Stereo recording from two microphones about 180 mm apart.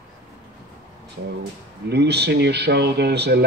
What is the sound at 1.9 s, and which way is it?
Speech, 65° right (ahead or behind).